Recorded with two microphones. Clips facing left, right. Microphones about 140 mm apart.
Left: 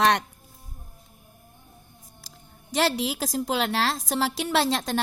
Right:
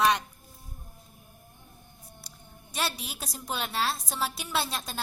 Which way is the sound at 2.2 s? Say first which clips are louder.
Left 2 dB; 90° left.